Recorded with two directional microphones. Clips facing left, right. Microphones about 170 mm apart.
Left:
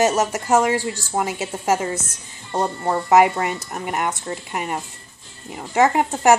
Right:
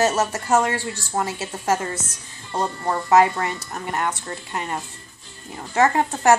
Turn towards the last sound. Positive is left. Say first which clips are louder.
# left 1 dB
turn(degrees=10)  # may be behind; listen again after turning